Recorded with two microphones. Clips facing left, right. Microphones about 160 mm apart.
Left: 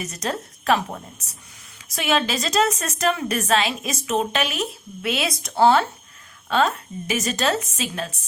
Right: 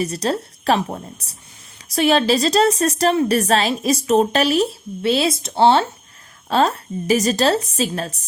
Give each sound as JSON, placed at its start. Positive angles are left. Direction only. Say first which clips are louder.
{"t": 0.0, "sound": "a woman's voice", "louder": "right 7 dB", "side_deg": -35}